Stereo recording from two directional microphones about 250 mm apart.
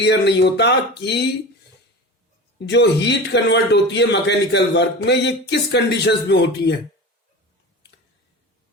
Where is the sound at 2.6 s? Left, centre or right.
Left.